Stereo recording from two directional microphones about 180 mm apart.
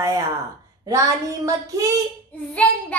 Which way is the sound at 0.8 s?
15° right (ahead or behind).